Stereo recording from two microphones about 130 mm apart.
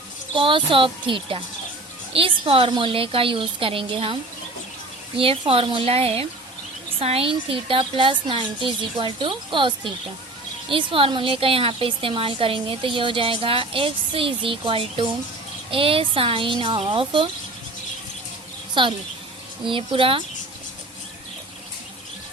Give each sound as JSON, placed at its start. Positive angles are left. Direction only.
{"t": 0.3, "sound": "a woman's voice", "side_deg": -40}
{"t": 18.7, "sound": "a woman's voice", "side_deg": -40}